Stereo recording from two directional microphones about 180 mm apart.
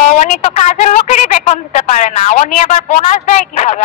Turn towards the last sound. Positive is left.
turn(degrees=40)  # may be behind; listen again after turning